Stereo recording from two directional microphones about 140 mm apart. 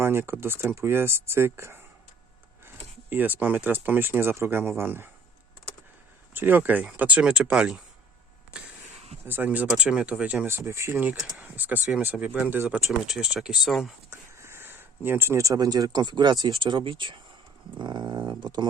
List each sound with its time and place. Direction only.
0.0 s speech: 15° right (ahead or behind)
6.3 s speech: 15° right (ahead or behind)
9.2 s speech: 15° right (ahead or behind)
10.9 s speech: 10° right (ahead or behind)
13.1 s speech: 5° right (ahead or behind)
14.1 s speech: 20° right (ahead or behind); by 17.2 s 35° right (ahead or behind)
17.7 s a sound: 30° right (ahead or behind)
18.3 s speech: 30° right (ahead or behind)